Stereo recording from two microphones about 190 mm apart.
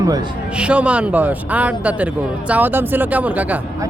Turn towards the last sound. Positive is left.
turn(degrees=-10)  # may be behind; listen again after turning